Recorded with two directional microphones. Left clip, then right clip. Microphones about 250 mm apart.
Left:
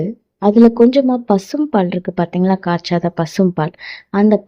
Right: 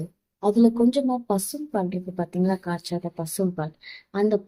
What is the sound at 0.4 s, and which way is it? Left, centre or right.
Speech, left.